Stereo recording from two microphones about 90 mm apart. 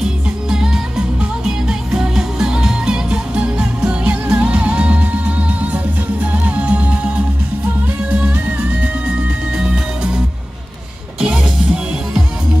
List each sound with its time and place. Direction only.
0.0 s music: 10° right (ahead or behind)
9.6 s music: 10° right (ahead or behind)